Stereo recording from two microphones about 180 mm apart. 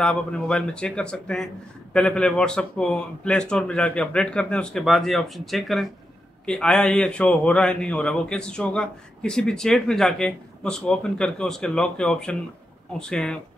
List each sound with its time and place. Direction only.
0.0 s a man's voice: 5° left (ahead or behind)